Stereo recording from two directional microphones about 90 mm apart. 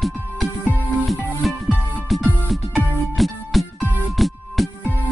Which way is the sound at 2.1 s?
Centre (ahead or behind).